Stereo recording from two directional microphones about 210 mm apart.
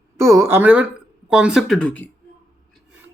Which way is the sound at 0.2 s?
15° right (ahead or behind).